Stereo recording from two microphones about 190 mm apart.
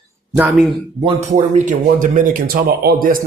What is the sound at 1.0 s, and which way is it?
Speech, 40° right (ahead or behind).